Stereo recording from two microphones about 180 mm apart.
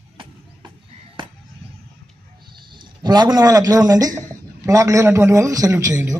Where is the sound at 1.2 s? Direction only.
25° right (ahead or behind).